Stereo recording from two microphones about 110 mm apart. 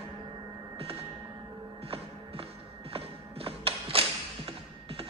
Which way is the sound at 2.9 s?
60° right (ahead or behind).